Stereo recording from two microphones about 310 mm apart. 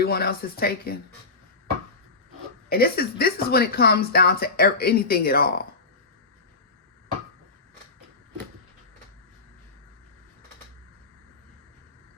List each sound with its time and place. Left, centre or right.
0.0 s speech: left
2.6 s speech: left